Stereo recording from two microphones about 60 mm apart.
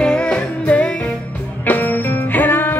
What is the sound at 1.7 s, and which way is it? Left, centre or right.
Music, left.